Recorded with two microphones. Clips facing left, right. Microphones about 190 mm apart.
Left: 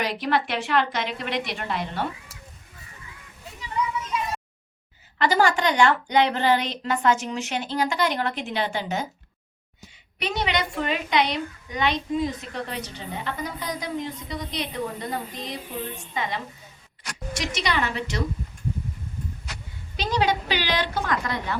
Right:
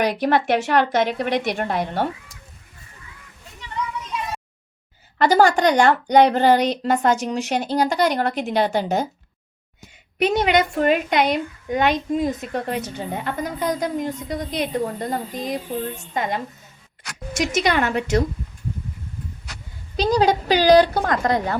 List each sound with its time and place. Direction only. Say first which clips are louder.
0.2 s a woman's voice: right 6 dB; 50° right (ahead or behind)
3.6 s a sound: left 1 dB; 5° left (ahead or behind)
5.1 s a woman's voice: right 5 dB; 40° right (ahead or behind)
10.2 s a woman's voice: right 8 dB; 50° right (ahead or behind)
20.0 s a woman's voice: right 6 dB; 40° right (ahead or behind)